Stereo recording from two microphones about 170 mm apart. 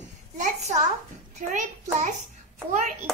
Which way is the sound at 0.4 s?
40° right (ahead or behind).